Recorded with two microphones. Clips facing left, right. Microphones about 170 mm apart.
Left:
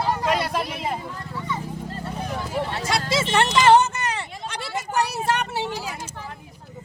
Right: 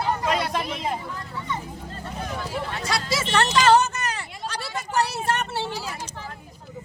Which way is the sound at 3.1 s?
25° left (ahead or behind).